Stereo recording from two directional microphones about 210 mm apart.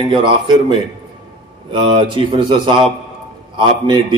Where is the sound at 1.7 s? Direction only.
20° right (ahead or behind).